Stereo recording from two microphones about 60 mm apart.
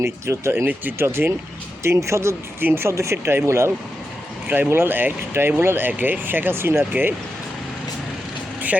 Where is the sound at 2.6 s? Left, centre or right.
Right.